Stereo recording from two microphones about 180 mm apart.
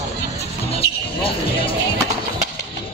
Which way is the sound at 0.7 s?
30° left (ahead or behind).